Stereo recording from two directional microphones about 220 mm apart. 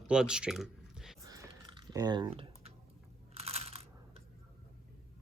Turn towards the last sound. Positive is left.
turn(degrees=-25)  # may be behind; listen again after turning